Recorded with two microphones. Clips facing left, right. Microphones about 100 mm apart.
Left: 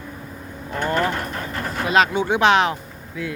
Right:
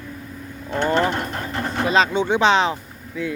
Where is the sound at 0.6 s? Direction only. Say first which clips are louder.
Right 2 dB; 25° right (ahead or behind).